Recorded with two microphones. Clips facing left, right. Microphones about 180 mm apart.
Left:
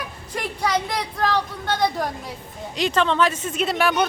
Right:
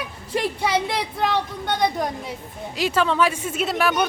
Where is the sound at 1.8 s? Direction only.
Centre (ahead or behind).